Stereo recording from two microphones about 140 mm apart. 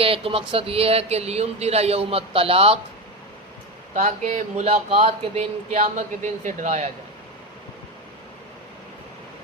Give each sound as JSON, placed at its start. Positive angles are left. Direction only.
{"t": 0.0, "sound": "speech", "side_deg": -40}
{"t": 3.9, "sound": "speech", "side_deg": -60}